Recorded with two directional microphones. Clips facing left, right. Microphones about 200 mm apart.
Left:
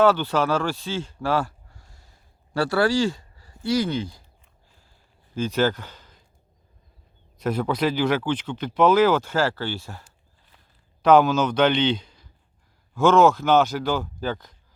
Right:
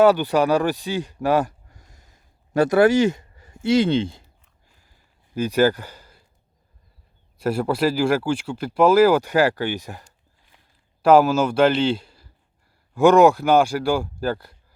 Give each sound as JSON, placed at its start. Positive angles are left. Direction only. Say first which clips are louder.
{"t": 0.0, "sound": "speech", "louder": "right 3 dB", "side_deg": -15}
{"t": 5.3, "sound": "speech", "louder": "right 4 dB", "side_deg": -10}
{"t": 7.4, "sound": "speech", "louder": "right 2 dB", "side_deg": -10}
{"t": 11.0, "sound": "a man's voice", "louder": "right 2 dB", "side_deg": -5}